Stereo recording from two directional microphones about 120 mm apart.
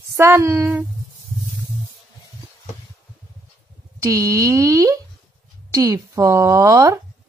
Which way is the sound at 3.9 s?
25° right (ahead or behind).